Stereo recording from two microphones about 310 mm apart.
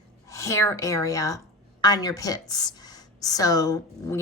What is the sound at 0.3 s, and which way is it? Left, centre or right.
A woman's voice, centre.